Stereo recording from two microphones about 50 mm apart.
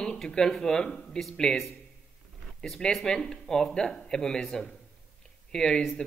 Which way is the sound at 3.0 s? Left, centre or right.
Centre.